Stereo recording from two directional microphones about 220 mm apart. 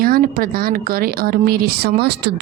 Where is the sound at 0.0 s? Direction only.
40° right (ahead or behind).